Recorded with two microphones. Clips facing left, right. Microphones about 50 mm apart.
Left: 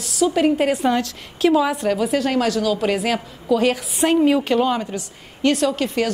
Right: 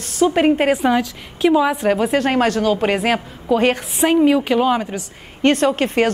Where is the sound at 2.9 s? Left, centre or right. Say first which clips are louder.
Right 3 dB; centre.